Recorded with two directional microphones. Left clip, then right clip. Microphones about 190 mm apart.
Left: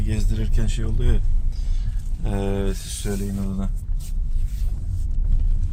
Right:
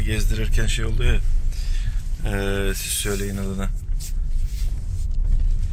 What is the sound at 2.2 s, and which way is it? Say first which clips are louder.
Speech: right 2 dB; 20° left (ahead or behind).